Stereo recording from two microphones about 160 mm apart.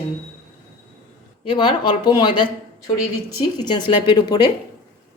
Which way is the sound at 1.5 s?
30° left (ahead or behind).